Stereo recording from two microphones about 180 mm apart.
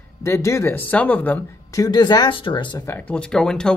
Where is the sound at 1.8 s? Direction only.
25° left (ahead or behind).